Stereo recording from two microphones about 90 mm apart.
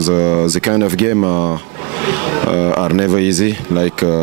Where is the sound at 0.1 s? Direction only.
25° right (ahead or behind).